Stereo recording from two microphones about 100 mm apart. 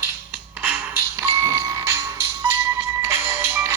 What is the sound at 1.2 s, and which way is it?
Music, 30° right (ahead or behind).